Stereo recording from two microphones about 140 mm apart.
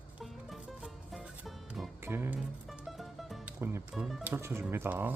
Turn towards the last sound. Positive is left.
turn(degrees=-15)  # may be behind; listen again after turning